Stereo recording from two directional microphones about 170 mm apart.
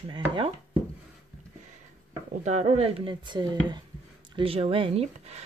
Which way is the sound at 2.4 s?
40° right (ahead or behind).